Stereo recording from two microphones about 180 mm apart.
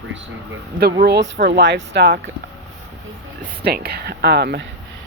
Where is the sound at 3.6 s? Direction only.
65° right (ahead or behind).